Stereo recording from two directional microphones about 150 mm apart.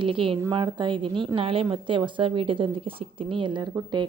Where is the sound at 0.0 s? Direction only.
35° right (ahead or behind).